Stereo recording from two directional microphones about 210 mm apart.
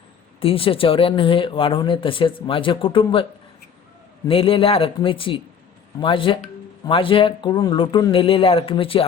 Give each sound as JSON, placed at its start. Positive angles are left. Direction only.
{"t": 0.3, "sound": "speech", "side_deg": 25}
{"t": 4.3, "sound": "speech", "side_deg": 25}